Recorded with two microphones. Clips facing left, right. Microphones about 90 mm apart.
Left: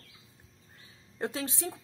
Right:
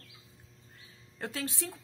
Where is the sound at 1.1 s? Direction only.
20° left (ahead or behind).